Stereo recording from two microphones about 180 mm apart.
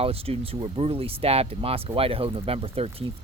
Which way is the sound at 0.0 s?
30° right (ahead or behind).